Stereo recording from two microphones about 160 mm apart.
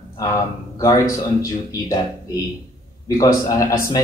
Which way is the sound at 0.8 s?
20° left (ahead or behind).